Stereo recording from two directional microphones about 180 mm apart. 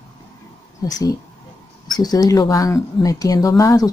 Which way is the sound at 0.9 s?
20° left (ahead or behind).